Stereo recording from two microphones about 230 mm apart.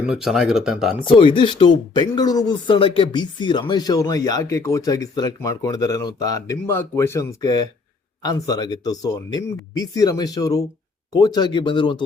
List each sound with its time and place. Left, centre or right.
0.0 s speech: centre
1.0 s speech: left